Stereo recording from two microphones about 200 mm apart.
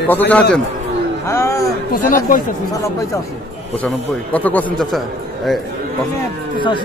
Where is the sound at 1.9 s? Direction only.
45° left (ahead or behind).